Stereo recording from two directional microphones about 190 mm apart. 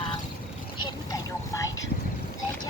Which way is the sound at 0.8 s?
20° left (ahead or behind).